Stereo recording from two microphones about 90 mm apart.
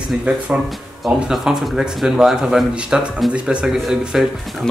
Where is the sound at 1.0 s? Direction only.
5° right (ahead or behind).